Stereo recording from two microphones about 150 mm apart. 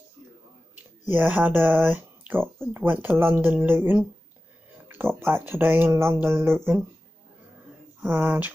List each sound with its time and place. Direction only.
0.7 s speech: 15° right (ahead or behind)
8.0 s speech: 10° right (ahead or behind)